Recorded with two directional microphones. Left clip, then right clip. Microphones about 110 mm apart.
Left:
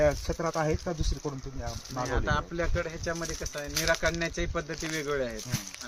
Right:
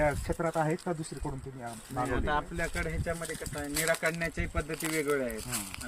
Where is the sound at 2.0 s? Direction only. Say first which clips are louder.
Left 1 dB; 25° left (ahead or behind).